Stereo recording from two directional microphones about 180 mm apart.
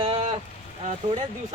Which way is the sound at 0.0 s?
30° right (ahead or behind).